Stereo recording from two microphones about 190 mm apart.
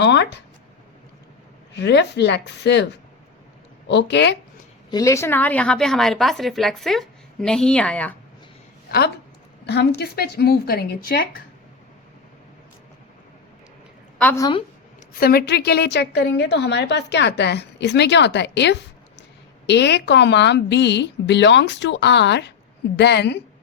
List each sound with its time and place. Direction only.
0.0 s speech: 65° left (ahead or behind)
1.7 s a woman's voice: 65° left (ahead or behind)
3.8 s a woman's voice: 65° left (ahead or behind)
4.9 s a woman's voice: 15° left (ahead or behind)
8.9 s a woman's voice: 55° left (ahead or behind)
14.2 s a woman's voice: 10° left (ahead or behind)
15.1 s a woman's voice: 55° left (ahead or behind)